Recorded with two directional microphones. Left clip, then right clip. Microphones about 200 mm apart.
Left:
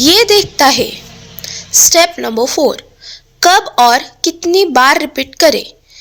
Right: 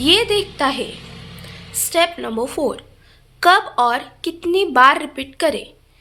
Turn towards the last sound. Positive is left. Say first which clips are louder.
# left 10 dB
turn(degrees=35)  # may be behind; listen again after turning